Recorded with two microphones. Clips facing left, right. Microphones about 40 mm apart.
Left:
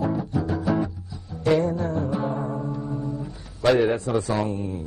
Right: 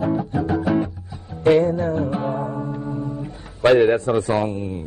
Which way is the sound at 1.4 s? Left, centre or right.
Right.